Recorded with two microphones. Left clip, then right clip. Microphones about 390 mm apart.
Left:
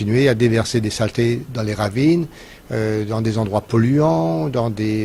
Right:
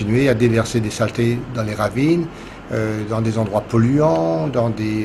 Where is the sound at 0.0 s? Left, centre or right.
Left.